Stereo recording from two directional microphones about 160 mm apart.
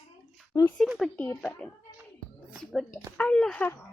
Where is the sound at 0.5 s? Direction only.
20° left (ahead or behind).